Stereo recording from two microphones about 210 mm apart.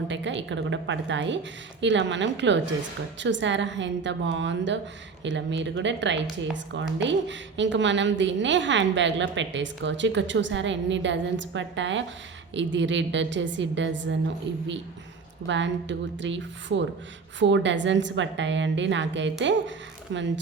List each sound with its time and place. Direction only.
0.1 s a woman's voice: 60° right (ahead or behind)